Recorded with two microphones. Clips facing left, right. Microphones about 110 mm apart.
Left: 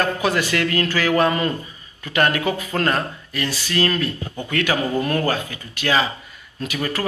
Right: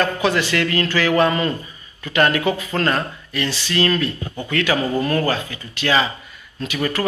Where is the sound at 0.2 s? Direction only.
45° left (ahead or behind).